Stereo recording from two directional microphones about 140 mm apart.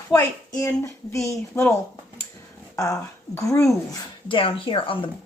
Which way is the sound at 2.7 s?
25° left (ahead or behind).